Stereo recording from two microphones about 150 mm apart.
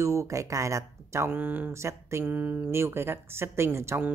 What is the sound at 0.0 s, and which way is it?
Speech, 20° right (ahead or behind).